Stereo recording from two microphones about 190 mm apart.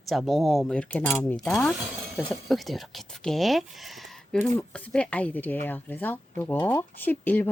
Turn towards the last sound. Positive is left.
turn(degrees=10)  # may be behind; listen again after turning